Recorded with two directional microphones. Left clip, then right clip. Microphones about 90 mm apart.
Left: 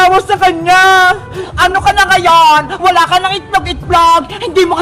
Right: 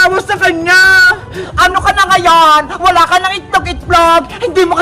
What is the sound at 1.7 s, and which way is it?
Speech, 35° right (ahead or behind).